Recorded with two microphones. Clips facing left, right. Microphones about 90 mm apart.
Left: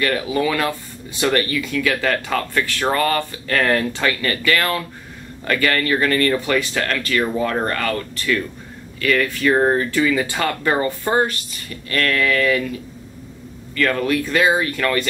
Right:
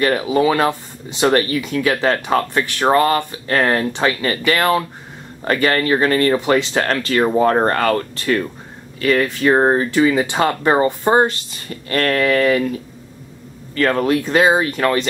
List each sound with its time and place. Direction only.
0.0 s speech: 25° right (ahead or behind)
9.0 s speech: 30° right (ahead or behind)
13.7 s speech: 35° right (ahead or behind)